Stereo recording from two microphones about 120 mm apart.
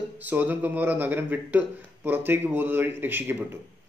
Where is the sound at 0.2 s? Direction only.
15° right (ahead or behind).